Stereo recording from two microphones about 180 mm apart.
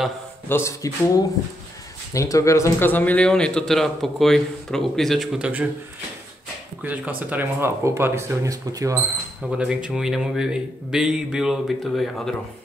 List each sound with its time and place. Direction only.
0.5 s speech: 15° left (ahead or behind); by 5.7 s 5° right (ahead or behind)
6.8 s speech: 10° right (ahead or behind)
9.4 s speech: 5° right (ahead or behind)